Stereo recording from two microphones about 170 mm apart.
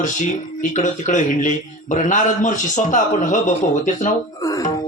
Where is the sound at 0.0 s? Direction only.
45° left (ahead or behind).